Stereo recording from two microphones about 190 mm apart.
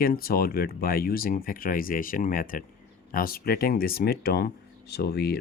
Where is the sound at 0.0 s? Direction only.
50° left (ahead or behind).